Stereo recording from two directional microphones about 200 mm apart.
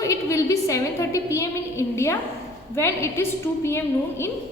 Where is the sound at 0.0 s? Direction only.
15° left (ahead or behind).